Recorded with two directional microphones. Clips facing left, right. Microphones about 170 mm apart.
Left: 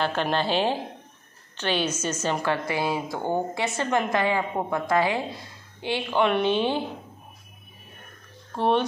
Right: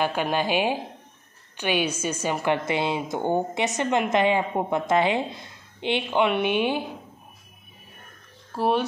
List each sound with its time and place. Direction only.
0.0 s a woman's voice: 10° right (ahead or behind)
8.5 s speech: 5° right (ahead or behind)